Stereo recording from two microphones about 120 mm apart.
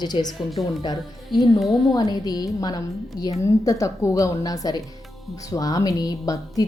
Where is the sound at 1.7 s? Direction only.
35° left (ahead or behind).